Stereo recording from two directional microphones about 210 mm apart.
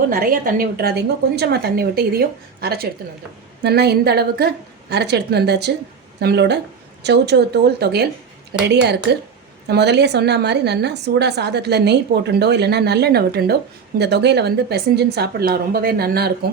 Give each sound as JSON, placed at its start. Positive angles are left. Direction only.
{"t": 0.1, "sound": "a woman's voice", "side_deg": -45}